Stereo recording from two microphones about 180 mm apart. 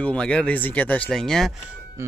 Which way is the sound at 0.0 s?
5° left (ahead or behind).